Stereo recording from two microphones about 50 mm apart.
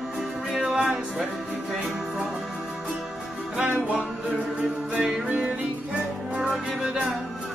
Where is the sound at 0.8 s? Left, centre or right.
Centre.